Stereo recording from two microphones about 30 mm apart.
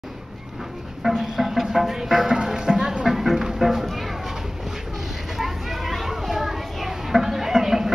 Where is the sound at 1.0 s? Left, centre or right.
Centre.